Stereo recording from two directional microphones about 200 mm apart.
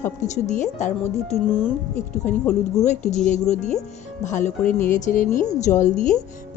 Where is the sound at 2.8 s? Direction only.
35° left (ahead or behind).